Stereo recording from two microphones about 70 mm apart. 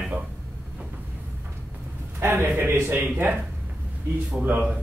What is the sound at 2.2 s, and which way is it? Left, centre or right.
A man's voice, right.